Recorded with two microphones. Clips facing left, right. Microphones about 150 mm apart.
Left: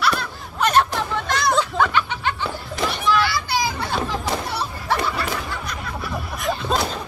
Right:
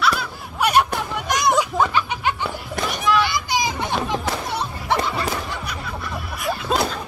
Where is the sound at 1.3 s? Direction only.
15° right (ahead or behind).